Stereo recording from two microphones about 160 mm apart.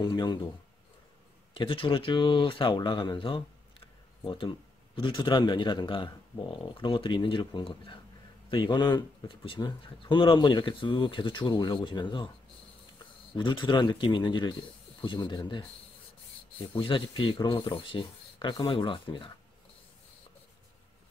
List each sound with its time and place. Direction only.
0.0 s speech: 25° left (ahead or behind)
1.5 s speech: 35° left (ahead or behind)
13.4 s speech: 30° left (ahead or behind)
16.7 s speech: 30° left (ahead or behind)